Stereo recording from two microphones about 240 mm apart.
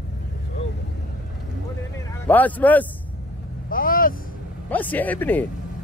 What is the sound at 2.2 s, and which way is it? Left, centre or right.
Speech, centre.